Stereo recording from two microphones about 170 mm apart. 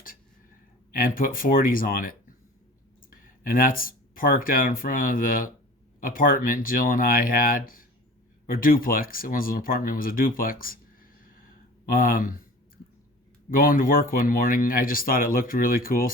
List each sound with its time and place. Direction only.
0.9 s speech: 55° left (ahead or behind)
13.5 s speech: 55° left (ahead or behind)